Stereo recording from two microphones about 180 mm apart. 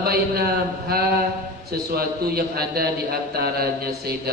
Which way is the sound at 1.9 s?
60° right (ahead or behind).